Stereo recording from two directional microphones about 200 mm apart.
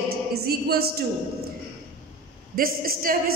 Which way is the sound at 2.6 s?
45° right (ahead or behind).